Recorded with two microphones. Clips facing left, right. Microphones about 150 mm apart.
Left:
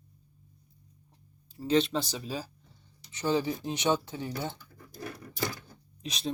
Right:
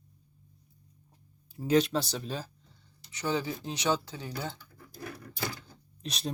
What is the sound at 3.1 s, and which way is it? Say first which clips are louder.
Speech: left 3 dB; 25° left (ahead or behind).